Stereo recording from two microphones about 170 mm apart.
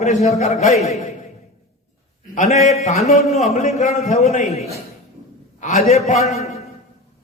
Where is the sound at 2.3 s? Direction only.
45° left (ahead or behind).